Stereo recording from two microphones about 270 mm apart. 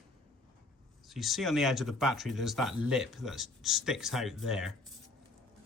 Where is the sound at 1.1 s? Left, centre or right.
Centre.